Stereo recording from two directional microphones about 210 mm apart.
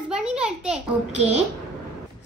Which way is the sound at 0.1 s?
5° right (ahead or behind).